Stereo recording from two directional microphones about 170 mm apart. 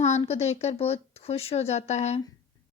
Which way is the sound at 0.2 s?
40° left (ahead or behind).